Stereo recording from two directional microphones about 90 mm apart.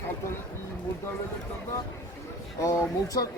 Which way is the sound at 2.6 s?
35° left (ahead or behind).